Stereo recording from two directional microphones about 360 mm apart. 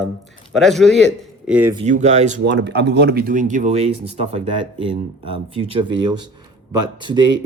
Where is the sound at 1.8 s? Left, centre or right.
Centre.